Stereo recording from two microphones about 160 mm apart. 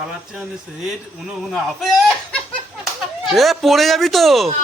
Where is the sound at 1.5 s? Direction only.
Centre (ahead or behind).